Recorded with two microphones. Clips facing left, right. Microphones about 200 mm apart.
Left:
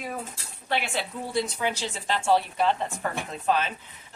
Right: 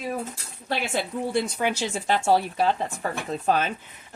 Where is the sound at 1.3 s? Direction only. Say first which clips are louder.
Right 1 dB; 55° right (ahead or behind).